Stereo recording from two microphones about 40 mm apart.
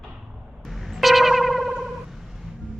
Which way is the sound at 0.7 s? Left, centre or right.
Centre.